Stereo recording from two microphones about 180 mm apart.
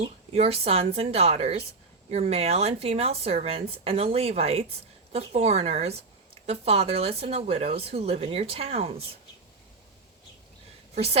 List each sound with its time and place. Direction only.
0.3 s speech: 35° right (ahead or behind)
10.9 s speech: 35° right (ahead or behind)